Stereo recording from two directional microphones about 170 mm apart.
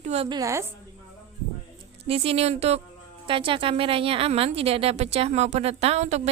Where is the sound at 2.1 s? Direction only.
35° right (ahead or behind).